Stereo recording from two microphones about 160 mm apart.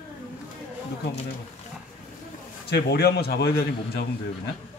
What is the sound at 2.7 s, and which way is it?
A man's voice, 80° left.